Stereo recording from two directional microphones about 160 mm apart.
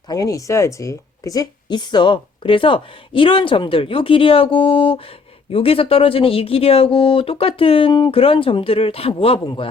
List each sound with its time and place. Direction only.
0.1 s speech: 20° left (ahead or behind)